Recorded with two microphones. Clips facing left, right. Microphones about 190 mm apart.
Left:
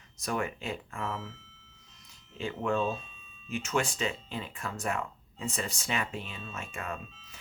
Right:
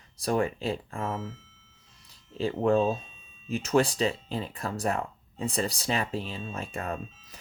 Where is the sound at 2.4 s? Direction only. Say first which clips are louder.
Right 6 dB; 35° right (ahead or behind).